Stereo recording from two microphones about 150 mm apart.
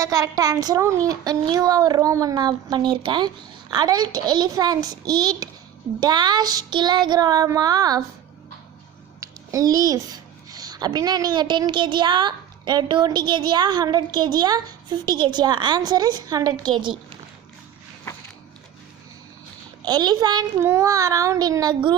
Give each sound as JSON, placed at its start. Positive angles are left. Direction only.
{"t": 0.0, "sound": "a child's voice", "side_deg": -20}
{"t": 9.2, "sound": "a child's voice", "side_deg": -20}
{"t": 19.8, "sound": "a child's voice", "side_deg": -30}